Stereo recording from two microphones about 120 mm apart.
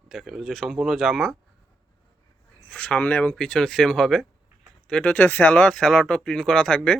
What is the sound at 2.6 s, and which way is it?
Speech, 10° left (ahead or behind).